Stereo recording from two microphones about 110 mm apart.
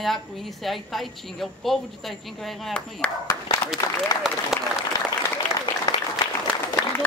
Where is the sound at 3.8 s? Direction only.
25° left (ahead or behind).